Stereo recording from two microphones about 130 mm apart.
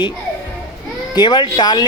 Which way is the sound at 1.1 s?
35° left (ahead or behind).